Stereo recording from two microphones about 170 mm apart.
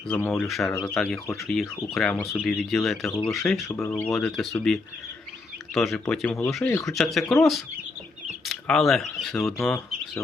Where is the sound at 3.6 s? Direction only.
15° left (ahead or behind).